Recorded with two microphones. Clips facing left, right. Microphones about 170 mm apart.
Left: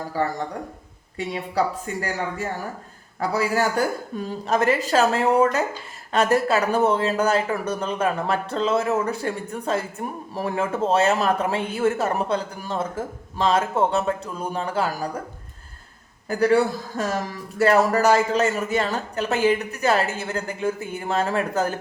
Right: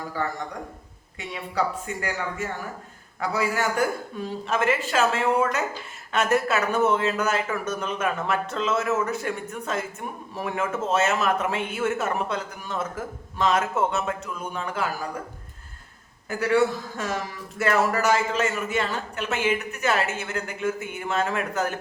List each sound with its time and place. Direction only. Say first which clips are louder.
1.3 s a man's voice: left 3 dB; 35° left (ahead or behind)
16.3 s a man's voice: left 3 dB; 35° left (ahead or behind)